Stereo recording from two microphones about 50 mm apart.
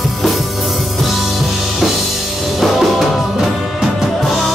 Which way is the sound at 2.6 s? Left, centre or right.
Centre.